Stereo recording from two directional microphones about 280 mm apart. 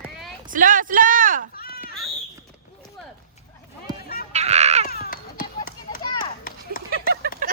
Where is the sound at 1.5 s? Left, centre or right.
Left.